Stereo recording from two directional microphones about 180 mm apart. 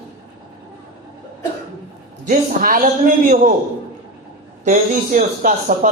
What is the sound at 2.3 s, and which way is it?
Speech, 50° right (ahead or behind).